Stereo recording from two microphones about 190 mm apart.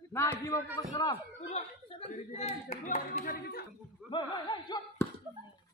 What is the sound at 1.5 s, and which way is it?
Speech, 35° left (ahead or behind).